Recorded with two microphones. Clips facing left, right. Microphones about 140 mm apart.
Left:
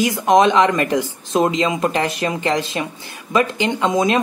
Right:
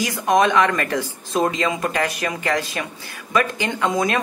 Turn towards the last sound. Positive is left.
turn(degrees=20)  # may be behind; listen again after turning